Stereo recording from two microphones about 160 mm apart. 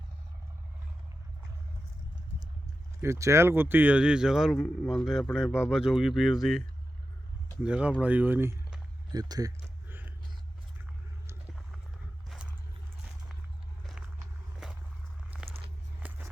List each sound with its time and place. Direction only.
3.0 s speech: 15° right (ahead or behind); by 6.6 s centre (ahead or behind)
7.6 s speech: 5° right (ahead or behind)
9.1 s speech: 25° right (ahead or behind)
9.9 s a sound: 10° right (ahead or behind)
12.3 s a sound: 5° right (ahead or behind)
14.6 s walk: 5° right (ahead or behind)
16.0 s walk: 10° right (ahead or behind)